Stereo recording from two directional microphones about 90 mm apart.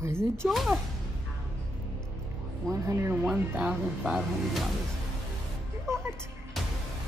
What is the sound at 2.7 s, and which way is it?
Speech, 35° right (ahead or behind).